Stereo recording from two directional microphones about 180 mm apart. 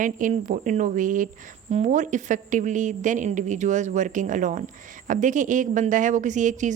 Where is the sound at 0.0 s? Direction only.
45° right (ahead or behind).